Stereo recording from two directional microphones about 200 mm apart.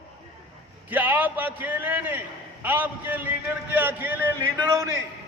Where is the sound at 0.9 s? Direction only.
10° right (ahead or behind).